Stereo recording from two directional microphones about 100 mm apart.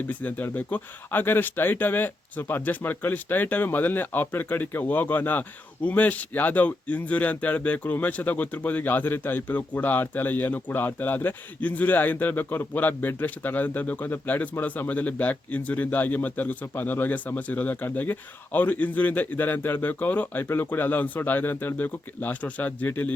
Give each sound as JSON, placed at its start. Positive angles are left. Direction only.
{"t": 0.1, "sound": "speech", "side_deg": 15}